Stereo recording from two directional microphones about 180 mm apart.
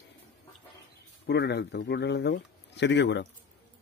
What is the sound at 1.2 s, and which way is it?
Speech, 70° left (ahead or behind).